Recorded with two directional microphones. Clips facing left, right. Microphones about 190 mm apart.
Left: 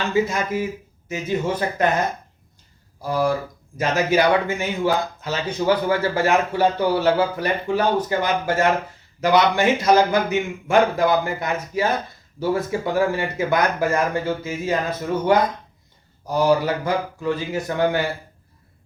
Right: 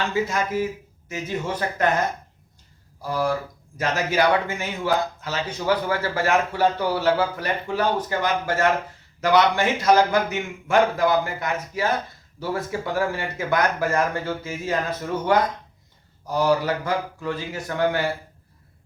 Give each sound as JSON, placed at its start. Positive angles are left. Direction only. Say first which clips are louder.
{"t": 0.1, "sound": "speech", "louder": "left 3 dB", "side_deg": 15}
{"t": 3.0, "sound": "speech", "louder": "left 3 dB", "side_deg": 15}
{"t": 16.2, "sound": "speech", "louder": "left 2 dB", "side_deg": 15}